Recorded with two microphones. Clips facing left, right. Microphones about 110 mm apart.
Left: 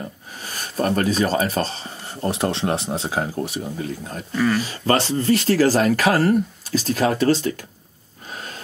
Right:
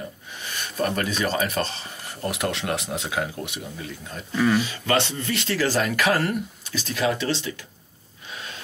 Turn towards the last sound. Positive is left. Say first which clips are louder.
# left 7 dB
turn(degrees=45)  # may be behind; listen again after turning